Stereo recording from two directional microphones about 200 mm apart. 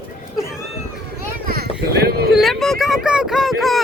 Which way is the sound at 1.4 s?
50° right (ahead or behind).